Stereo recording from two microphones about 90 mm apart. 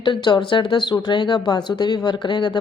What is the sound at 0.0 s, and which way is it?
Speech, 60° left (ahead or behind).